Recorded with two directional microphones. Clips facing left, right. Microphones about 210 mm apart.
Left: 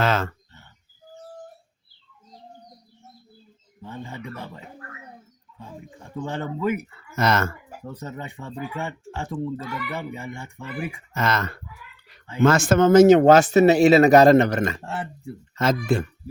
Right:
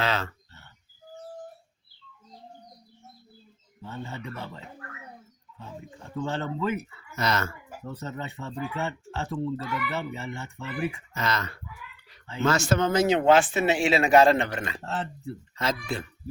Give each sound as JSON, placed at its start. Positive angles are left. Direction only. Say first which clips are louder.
{"t": 0.0, "sound": "a sound", "louder": "left 5 dB", "side_deg": 50}
{"t": 3.8, "sound": "speech", "louder": "left 2 dB", "side_deg": 15}
{"t": 7.2, "sound": "speech", "louder": "left 6 dB", "side_deg": 50}
{"t": 7.9, "sound": "speech", "louder": "even", "side_deg": 15}
{"t": 11.1, "sound": "speech", "louder": "left 5 dB", "side_deg": 50}
{"t": 14.8, "sound": "speech", "louder": "left 1 dB", "side_deg": 10}
{"t": 15.5, "sound": "speech", "louder": "left 8 dB", "side_deg": 45}